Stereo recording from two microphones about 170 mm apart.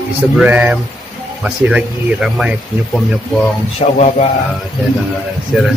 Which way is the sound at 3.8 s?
40° left (ahead or behind).